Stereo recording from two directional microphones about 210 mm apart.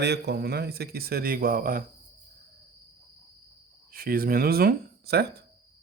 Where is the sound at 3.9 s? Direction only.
45° right (ahead or behind).